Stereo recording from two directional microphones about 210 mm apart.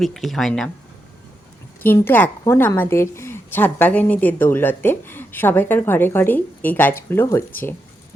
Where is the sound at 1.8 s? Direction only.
10° left (ahead or behind).